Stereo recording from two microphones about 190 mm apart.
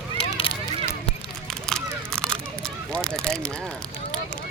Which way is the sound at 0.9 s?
5° left (ahead or behind).